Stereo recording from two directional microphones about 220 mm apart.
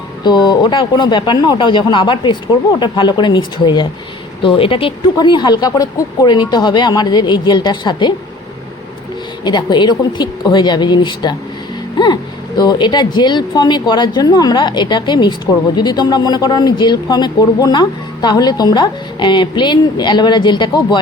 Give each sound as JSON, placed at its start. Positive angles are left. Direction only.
{"t": 0.3, "sound": "speech", "side_deg": 20}
{"t": 9.4, "sound": "speech", "side_deg": 20}